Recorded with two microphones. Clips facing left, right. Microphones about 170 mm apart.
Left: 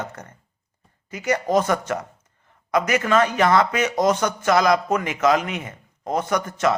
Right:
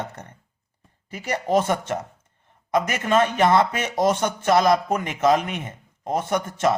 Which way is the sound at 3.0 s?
25° right (ahead or behind).